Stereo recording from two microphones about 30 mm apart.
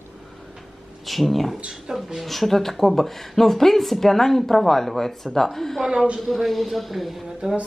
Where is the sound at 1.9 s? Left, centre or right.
Right.